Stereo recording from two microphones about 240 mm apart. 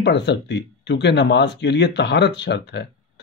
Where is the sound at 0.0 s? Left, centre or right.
Left.